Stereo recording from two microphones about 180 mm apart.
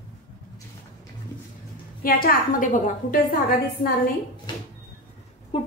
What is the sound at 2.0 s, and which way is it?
A woman's voice, 55° left (ahead or behind).